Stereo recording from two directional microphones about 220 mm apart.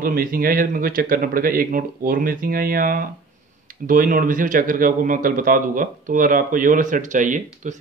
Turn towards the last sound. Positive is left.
turn(degrees=-35)  # may be behind; listen again after turning